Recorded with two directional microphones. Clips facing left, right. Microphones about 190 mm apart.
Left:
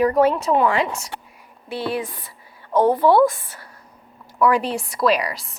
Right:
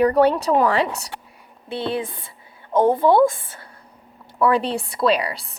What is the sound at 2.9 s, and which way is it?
A woman's voice, 25° right (ahead or behind).